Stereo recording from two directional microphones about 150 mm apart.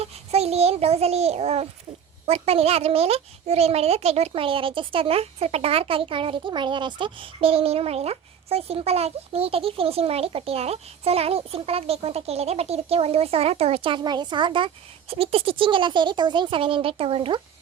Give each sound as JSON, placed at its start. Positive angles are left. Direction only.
{"t": 0.0, "sound": "a child's voice", "side_deg": -45}